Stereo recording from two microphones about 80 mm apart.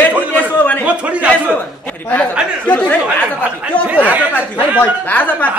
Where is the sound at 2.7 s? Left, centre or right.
Centre.